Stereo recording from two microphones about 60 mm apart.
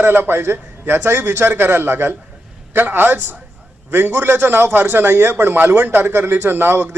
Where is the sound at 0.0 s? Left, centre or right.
Right.